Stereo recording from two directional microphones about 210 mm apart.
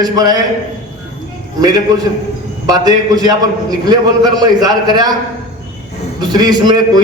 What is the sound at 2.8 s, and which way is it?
A man's voice, 20° right (ahead or behind).